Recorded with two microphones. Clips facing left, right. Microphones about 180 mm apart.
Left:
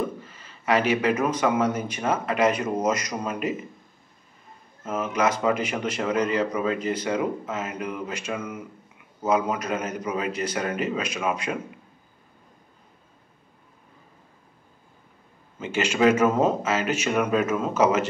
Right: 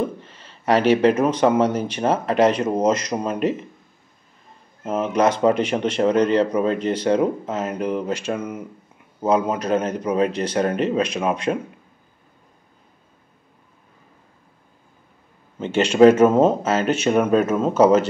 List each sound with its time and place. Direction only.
0.3 s speech: 30° right (ahead or behind)
4.8 s speech: 30° right (ahead or behind)
15.7 s speech: 30° right (ahead or behind)